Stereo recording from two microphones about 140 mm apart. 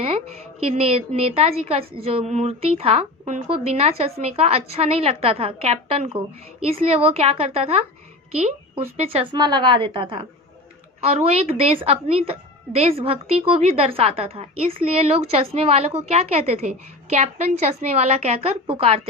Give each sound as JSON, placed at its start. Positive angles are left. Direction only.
{"t": 0.6, "sound": "a woman's voice", "side_deg": -45}